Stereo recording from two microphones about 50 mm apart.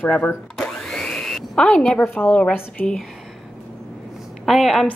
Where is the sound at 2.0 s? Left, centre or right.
Left.